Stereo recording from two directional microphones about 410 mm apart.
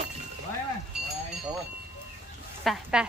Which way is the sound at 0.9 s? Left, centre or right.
Centre.